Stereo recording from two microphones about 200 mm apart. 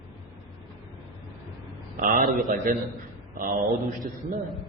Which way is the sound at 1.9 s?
45° right (ahead or behind).